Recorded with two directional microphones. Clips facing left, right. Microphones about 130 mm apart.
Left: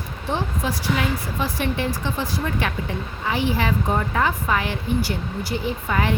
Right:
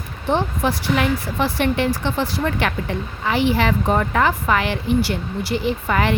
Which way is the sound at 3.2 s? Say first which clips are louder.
Right 4 dB; 80° right.